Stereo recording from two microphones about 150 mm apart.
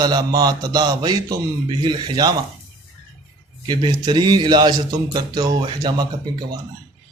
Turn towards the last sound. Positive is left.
turn(degrees=-30)  # may be behind; listen again after turning